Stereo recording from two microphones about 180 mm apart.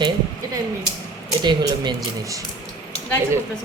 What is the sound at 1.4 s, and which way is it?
Speech, 25° right (ahead or behind).